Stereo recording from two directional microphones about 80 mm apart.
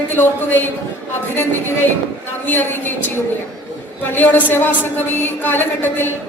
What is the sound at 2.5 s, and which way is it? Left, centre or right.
Speech, left.